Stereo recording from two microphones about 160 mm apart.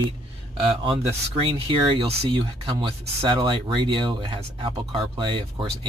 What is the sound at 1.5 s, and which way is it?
Speech, 35° right (ahead or behind).